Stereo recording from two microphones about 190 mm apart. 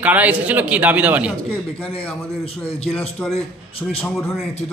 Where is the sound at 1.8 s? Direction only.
30° left (ahead or behind).